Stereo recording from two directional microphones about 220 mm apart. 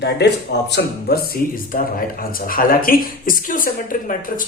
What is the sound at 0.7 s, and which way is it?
Speech, 45° left (ahead or behind).